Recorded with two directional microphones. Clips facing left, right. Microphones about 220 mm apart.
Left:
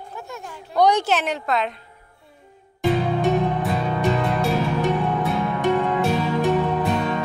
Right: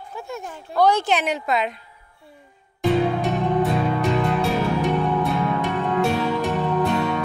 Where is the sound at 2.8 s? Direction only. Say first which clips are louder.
Right 1 dB; centre (ahead or behind).